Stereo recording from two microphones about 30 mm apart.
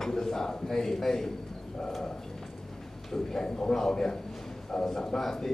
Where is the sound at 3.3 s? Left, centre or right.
Left.